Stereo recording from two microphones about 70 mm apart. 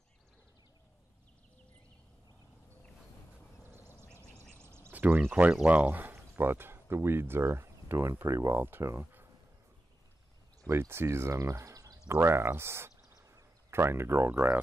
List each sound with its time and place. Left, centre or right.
3.7 s duck: right
4.6 s a sound: right
4.9 s a sound: right
5.3 s speech: centre; by 8.6 s right
8.6 s speech: right
10.7 s speech: right
12.1 s speech: right